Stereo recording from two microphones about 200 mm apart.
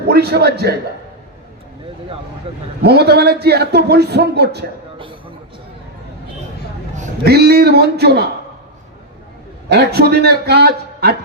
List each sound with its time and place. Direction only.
0.0 s a man's voice: 50° right (ahead or behind)
2.8 s a man's voice: 55° right (ahead or behind)
7.3 s a man's voice: 55° right (ahead or behind)
9.6 s a man's voice: 55° right (ahead or behind)